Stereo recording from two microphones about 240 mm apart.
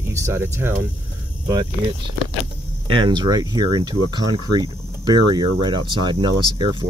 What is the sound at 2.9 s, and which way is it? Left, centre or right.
Speech, centre.